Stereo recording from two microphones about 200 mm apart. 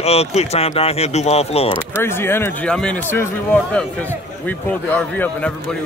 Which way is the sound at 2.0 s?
10° left (ahead or behind).